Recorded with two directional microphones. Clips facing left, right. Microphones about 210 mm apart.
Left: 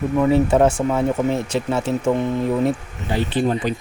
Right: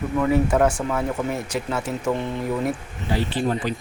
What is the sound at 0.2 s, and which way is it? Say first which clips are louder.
Speech: left 3 dB; 25° left (ahead or behind).